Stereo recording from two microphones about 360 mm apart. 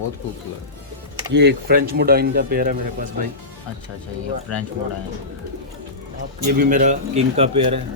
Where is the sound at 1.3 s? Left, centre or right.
Right.